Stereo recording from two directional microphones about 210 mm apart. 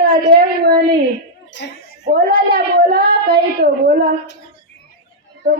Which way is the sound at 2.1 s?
45° right (ahead or behind).